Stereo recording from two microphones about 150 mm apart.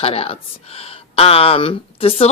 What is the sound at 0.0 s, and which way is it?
Speech, 40° left (ahead or behind).